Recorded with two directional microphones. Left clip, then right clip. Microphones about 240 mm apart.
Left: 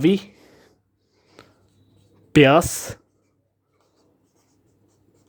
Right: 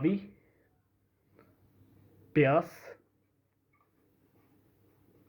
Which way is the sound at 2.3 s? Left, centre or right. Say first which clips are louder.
Left 12 dB; left.